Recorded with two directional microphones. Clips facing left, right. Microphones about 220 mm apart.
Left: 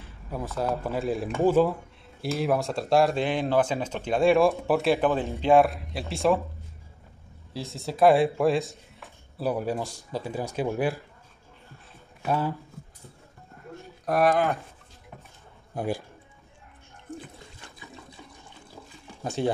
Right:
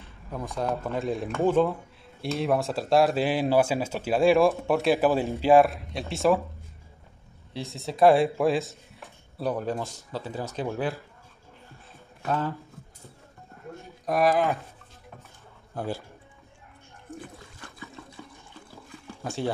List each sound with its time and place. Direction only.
0.6 s speech: 5° left (ahead or behind)
7.5 s speech: centre (ahead or behind)
12.2 s speech: 10° left (ahead or behind)
14.0 s speech: centre (ahead or behind)
15.7 s speech: 15° left (ahead or behind)
17.2 s water: 20° left (ahead or behind)
19.2 s speech: 15° left (ahead or behind)